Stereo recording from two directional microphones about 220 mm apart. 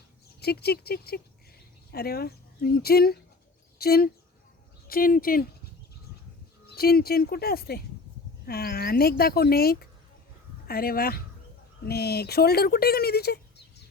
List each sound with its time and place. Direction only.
0.3 s speech: 45° left (ahead or behind)
6.7 s speech: 45° left (ahead or behind)